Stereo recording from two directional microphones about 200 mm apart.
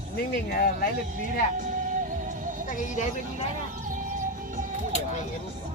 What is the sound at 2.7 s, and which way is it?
Speech, 35° left (ahead or behind).